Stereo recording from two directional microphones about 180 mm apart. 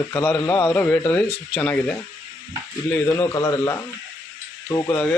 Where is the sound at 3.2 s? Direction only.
20° left (ahead or behind).